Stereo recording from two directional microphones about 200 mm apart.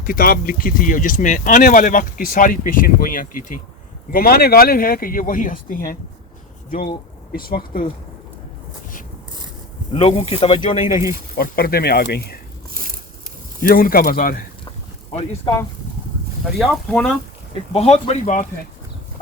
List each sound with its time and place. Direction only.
0.0 s speech: 45° left (ahead or behind)
7.3 s speech: 45° left (ahead or behind)
9.9 s speech: 30° left (ahead or behind)
11.3 s speech: 50° left (ahead or behind)
12.7 s a sound: 45° right (ahead or behind)
13.6 s speech: 45° left (ahead or behind)
16.4 s speech: centre (ahead or behind)
17.7 s speech: 30° left (ahead or behind)